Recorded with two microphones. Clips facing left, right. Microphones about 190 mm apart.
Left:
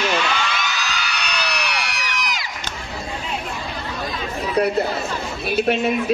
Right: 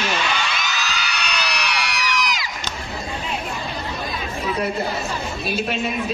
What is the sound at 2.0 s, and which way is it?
Crowd, 55° left (ahead or behind).